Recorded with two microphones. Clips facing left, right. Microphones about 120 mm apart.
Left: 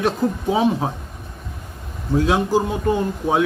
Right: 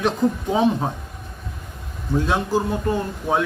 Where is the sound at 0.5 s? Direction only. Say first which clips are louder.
Left 1 dB; 5° left (ahead or behind).